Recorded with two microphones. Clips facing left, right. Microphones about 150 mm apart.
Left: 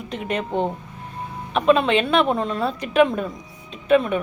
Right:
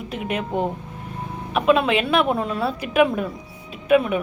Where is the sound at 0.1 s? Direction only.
5° right (ahead or behind).